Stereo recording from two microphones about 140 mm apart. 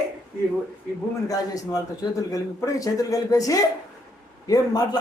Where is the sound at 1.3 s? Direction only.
25° left (ahead or behind).